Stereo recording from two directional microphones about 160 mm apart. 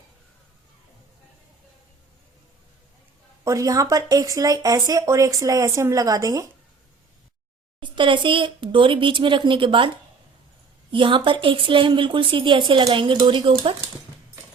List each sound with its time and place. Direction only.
3.4 s speech: 20° right (ahead or behind)
7.8 s speech: 30° right (ahead or behind)
10.9 s speech: 30° right (ahead or behind)